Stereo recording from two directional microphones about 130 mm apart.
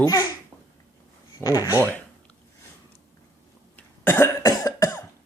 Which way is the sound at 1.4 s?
25° left (ahead or behind).